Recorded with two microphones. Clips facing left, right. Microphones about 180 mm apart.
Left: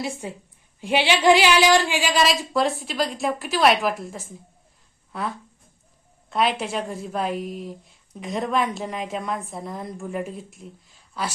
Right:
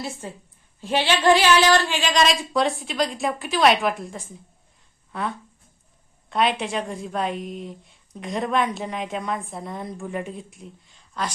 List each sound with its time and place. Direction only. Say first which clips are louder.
0.0 s a woman's voice: left 3 dB; 15° left (ahead or behind)